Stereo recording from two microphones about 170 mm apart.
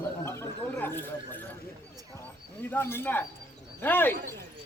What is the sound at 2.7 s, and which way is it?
Speech, 15° left (ahead or behind).